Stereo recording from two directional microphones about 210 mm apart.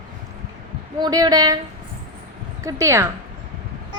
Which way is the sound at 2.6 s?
15° right (ahead or behind).